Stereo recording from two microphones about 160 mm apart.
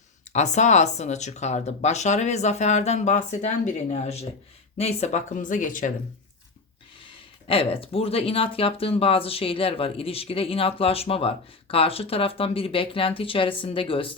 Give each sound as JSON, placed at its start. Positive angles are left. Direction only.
{"t": 0.3, "sound": "speech", "side_deg": 45}
{"t": 7.0, "sound": "speech", "side_deg": 35}